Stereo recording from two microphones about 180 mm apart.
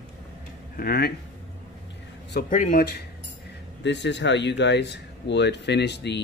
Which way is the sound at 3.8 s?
75° left (ahead or behind).